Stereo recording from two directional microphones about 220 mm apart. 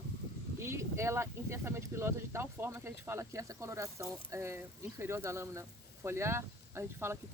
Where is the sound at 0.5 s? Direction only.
10° right (ahead or behind).